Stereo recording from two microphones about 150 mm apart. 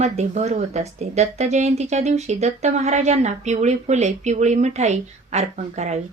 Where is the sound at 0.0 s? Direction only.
45° right (ahead or behind).